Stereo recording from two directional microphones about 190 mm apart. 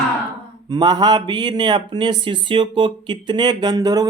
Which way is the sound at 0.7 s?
20° right (ahead or behind).